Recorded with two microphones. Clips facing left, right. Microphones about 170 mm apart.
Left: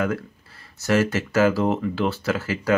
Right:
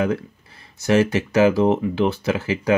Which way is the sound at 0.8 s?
15° right (ahead or behind).